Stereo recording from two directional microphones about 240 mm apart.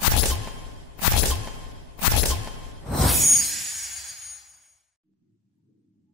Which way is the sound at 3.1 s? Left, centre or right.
Centre.